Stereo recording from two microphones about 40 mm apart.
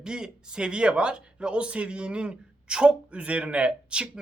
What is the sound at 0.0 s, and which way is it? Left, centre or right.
Speech, centre.